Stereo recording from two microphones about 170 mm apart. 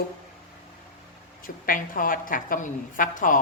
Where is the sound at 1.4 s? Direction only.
55° left (ahead or behind).